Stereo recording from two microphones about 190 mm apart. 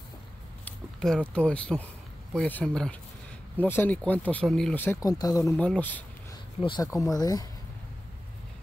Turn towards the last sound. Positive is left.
turn(degrees=20)  # may be behind; listen again after turning